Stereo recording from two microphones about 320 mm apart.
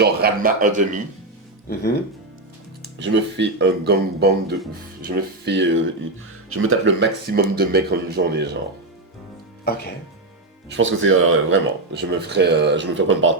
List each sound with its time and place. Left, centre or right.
0.0 s a man's voice: right
3.0 s speech: right
9.7 s speech: left
10.7 s speech: right